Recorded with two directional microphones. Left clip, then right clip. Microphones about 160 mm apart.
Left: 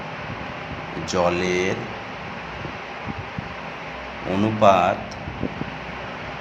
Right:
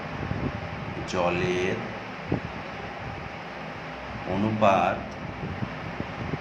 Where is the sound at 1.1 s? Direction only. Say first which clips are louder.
Left 5 dB; 30° left (ahead or behind).